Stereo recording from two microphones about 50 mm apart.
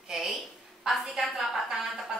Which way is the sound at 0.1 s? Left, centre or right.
Centre.